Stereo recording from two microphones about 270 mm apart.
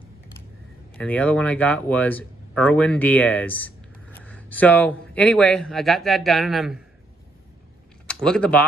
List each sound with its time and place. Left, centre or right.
0.9 s speech: centre
8.1 s speech: centre